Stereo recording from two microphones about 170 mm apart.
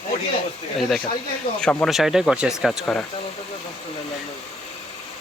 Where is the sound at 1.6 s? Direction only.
5° left (ahead or behind).